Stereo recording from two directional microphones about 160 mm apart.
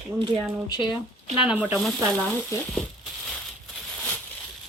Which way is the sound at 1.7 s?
5° left (ahead or behind).